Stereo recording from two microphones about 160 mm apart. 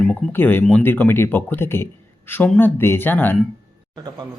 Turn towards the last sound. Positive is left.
turn(degrees=10)  # may be behind; listen again after turning